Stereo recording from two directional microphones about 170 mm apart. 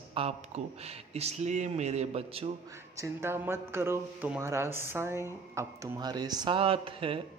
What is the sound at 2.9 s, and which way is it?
Speech, 15° right (ahead or behind).